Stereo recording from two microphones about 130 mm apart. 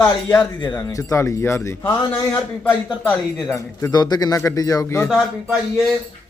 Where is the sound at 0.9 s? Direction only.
25° left (ahead or behind).